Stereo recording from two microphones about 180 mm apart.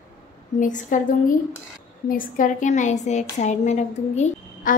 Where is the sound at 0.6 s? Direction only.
45° left (ahead or behind).